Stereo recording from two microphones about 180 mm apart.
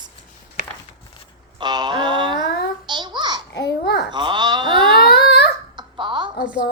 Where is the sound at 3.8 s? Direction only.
70° left (ahead or behind).